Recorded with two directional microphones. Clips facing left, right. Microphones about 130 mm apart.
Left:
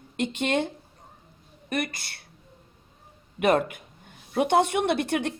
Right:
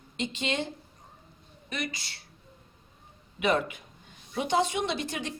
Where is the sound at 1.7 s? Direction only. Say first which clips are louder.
Left 6 dB; 55° left (ahead or behind).